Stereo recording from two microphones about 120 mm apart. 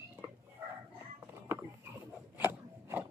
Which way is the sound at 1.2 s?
20° right (ahead or behind).